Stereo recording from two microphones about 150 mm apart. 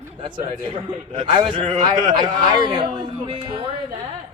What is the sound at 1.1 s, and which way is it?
A man's voice, 55° right (ahead or behind).